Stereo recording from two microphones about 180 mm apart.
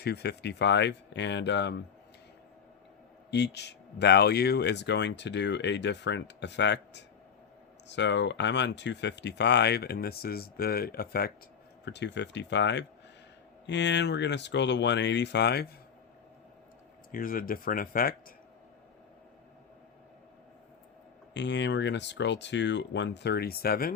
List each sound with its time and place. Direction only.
0.0 s speech: 65° left (ahead or behind)
3.2 s speech: 70° left (ahead or behind)
11.9 s speech: 75° left (ahead or behind)
17.1 s speech: 50° left (ahead or behind)
21.3 s speech: 80° left; by 23.9 s 55° left (ahead or behind)